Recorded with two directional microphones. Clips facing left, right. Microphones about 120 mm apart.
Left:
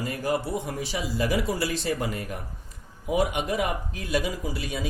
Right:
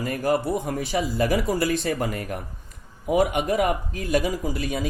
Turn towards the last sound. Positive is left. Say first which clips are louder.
# right 5 dB
turn(degrees=-50)  # may be behind; listen again after turning